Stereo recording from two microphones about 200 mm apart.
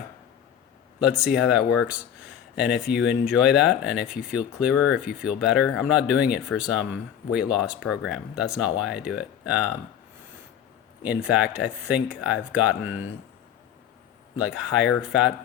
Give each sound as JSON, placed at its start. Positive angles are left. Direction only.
{"t": 0.9, "sound": "speech", "side_deg": -5}
{"t": 2.9, "sound": "speech", "side_deg": 60}
{"t": 3.2, "sound": "speech", "side_deg": -5}
{"t": 11.0, "sound": "speech", "side_deg": -5}
{"t": 14.3, "sound": "speech", "side_deg": -5}